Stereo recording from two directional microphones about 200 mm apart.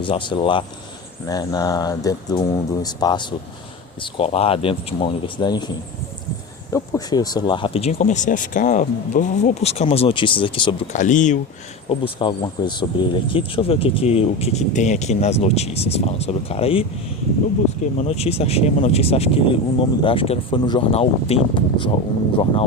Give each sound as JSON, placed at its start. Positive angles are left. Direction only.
{"t": 0.0, "sound": "speech", "side_deg": 25}
{"t": 10.9, "sound": "speech", "side_deg": 40}
{"t": 11.9, "sound": "speech", "side_deg": 25}
{"t": 18.1, "sound": "speech", "side_deg": 30}